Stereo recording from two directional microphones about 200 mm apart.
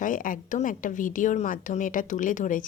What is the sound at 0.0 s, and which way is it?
A woman's voice, 40° left (ahead or behind).